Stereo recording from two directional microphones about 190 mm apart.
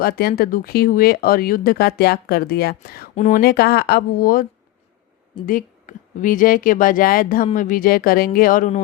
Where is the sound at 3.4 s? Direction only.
55° left (ahead or behind).